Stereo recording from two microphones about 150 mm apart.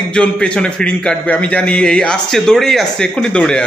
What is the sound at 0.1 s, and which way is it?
A man's voice, 5° left (ahead or behind).